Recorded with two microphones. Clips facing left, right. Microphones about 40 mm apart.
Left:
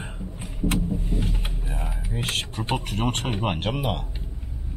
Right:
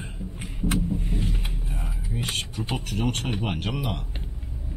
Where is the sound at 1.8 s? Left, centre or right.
Left.